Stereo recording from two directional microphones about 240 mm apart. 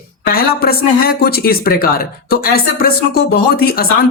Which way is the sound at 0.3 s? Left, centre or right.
Left.